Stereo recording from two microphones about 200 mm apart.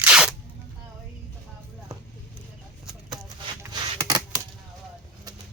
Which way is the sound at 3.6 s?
15° right (ahead or behind).